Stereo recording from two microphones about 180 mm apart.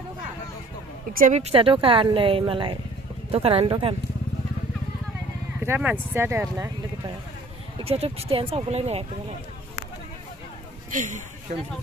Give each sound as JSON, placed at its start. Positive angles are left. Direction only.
{"t": 1.1, "sound": "a woman's voice", "side_deg": -45}
{"t": 5.6, "sound": "speech", "side_deg": -10}
{"t": 7.8, "sound": "a woman's voice", "side_deg": -35}
{"t": 10.9, "sound": "a man's voice", "side_deg": -45}